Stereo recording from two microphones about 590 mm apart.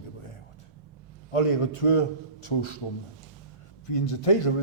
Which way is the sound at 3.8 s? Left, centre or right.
Left.